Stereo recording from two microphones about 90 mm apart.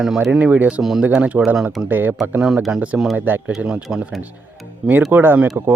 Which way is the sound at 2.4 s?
5° right (ahead or behind).